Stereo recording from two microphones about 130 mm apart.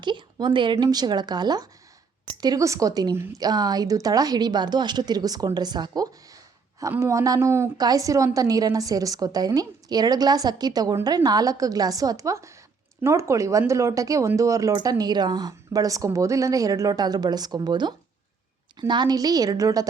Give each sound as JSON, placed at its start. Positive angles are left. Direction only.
{"t": 0.0, "sound": "a woman's voice", "side_deg": -35}